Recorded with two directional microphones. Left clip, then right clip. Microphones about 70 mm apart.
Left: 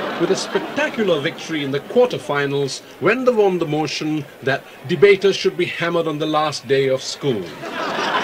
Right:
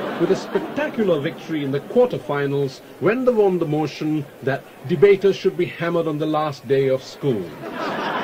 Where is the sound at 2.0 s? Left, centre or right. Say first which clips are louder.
Left 2 dB; left.